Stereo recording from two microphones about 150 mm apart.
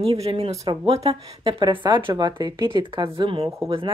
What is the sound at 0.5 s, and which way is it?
Speech, 25° right (ahead or behind).